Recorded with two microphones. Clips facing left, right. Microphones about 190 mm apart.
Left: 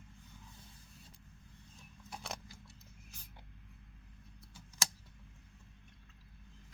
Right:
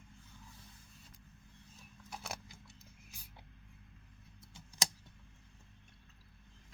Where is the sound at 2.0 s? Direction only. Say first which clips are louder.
Even; 5° right (ahead or behind).